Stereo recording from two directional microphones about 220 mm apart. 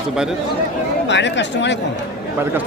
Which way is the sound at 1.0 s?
55° left (ahead or behind).